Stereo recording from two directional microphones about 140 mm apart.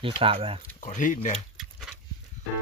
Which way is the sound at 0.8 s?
65° left (ahead or behind).